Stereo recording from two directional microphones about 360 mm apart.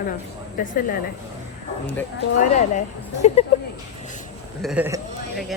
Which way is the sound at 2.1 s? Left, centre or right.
Left.